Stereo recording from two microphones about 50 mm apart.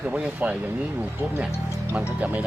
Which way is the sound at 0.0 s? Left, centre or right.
Right.